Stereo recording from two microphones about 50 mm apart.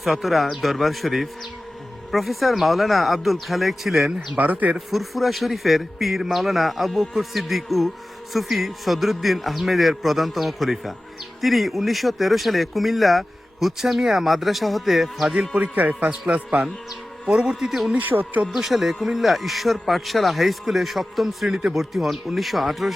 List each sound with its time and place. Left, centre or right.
0.0 s speech: centre
4.4 s speech: right
4.9 s speech: centre
15.3 s a man's voice: right
17.9 s speech: right
18.5 s speech: centre